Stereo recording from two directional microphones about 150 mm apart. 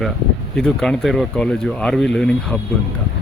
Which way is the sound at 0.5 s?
5° left (ahead or behind).